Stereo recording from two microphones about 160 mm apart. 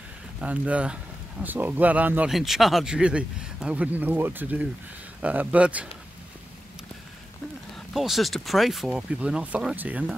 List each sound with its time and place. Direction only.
0.4 s speech: 10° right (ahead or behind)
7.9 s speech: centre (ahead or behind)